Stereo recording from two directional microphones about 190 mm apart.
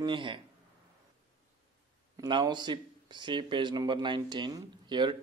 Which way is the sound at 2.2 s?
25° right (ahead or behind).